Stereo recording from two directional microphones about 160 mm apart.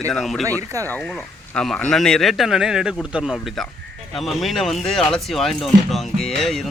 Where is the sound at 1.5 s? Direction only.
5° left (ahead or behind).